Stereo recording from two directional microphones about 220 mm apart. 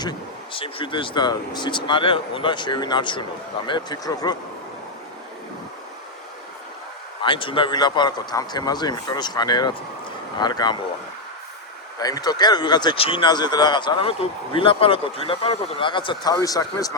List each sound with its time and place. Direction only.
0.0 s speech: 20° left (ahead or behind)
7.2 s speech: 20° left (ahead or behind)
11.9 s speech: 15° left (ahead or behind)